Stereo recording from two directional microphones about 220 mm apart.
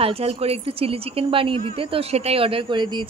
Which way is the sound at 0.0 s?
25° right (ahead or behind).